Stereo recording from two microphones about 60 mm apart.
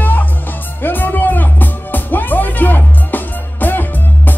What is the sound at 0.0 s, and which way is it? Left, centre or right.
Music, left.